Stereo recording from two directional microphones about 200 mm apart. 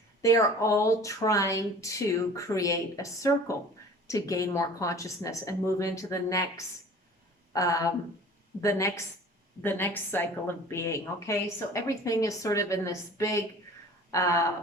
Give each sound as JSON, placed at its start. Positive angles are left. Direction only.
{"t": 0.2, "sound": "a woman's voice", "side_deg": 15}
{"t": 9.6, "sound": "a woman's voice", "side_deg": 10}